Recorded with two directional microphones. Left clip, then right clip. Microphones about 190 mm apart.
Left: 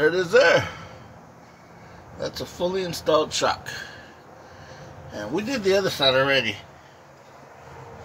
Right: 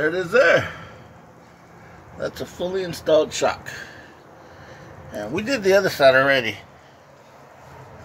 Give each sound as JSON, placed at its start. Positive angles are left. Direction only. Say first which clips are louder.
{"t": 0.0, "sound": "a man's voice", "louder": "left 1 dB", "side_deg": 25}
{"t": 0.4, "sound": "speech", "louder": "right 2 dB", "side_deg": 10}
{"t": 2.1, "sound": "speech", "louder": "right 2 dB", "side_deg": 5}
{"t": 5.3, "sound": "speech", "louder": "right 4 dB", "side_deg": -25}